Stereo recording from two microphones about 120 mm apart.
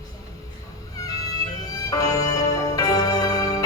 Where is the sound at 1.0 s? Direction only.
30° left (ahead or behind).